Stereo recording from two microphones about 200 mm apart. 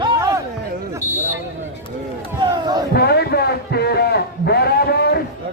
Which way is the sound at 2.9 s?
50° left (ahead or behind).